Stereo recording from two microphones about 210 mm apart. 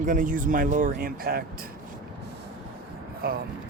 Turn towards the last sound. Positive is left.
turn(degrees=-45)  # may be behind; listen again after turning